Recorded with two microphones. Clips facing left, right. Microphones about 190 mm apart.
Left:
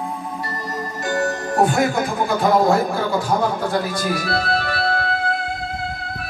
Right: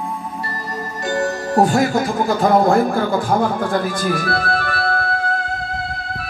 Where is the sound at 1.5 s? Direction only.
40° right (ahead or behind).